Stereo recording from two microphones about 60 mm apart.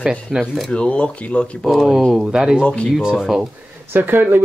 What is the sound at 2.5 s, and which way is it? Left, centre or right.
Speech, centre.